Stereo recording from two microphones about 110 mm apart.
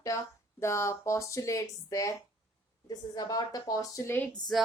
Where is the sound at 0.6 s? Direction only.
25° left (ahead or behind).